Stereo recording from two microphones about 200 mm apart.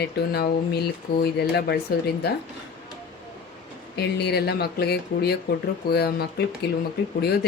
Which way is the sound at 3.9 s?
55° left (ahead or behind).